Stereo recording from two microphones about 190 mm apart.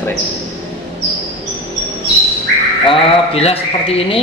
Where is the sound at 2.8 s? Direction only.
30° left (ahead or behind).